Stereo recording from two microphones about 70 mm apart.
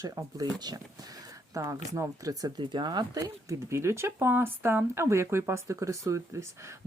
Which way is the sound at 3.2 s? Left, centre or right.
Right.